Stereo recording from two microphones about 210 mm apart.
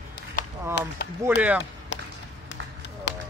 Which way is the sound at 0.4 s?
40° left (ahead or behind).